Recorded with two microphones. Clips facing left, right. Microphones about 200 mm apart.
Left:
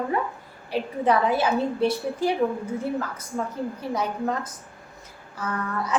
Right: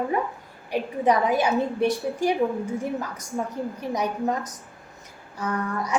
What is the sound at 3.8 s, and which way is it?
Speech, 15° right (ahead or behind).